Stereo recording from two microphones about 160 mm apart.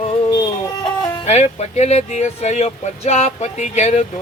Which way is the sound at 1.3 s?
45° left (ahead or behind).